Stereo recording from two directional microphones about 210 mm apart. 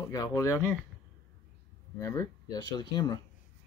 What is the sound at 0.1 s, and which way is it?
Speech, 15° left (ahead or behind).